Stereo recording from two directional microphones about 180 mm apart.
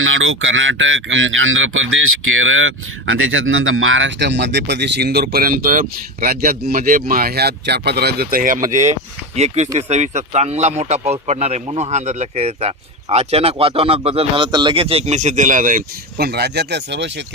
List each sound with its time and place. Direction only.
0.0 s speech: 90° right; by 8.7 s 50° right (ahead or behind)
8.9 s speech: 40° right (ahead or behind); by 17.2 s 75° right (ahead or behind)